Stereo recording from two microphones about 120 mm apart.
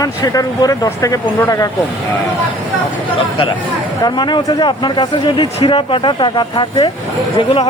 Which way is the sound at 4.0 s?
35° left (ahead or behind).